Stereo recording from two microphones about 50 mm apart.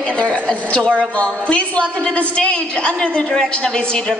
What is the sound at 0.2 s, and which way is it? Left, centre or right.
A woman's voice, left.